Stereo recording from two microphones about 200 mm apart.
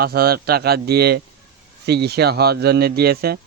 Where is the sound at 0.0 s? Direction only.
50° right (ahead or behind).